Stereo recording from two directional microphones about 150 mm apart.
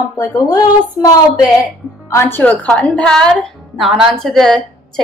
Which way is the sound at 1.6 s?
20° left (ahead or behind).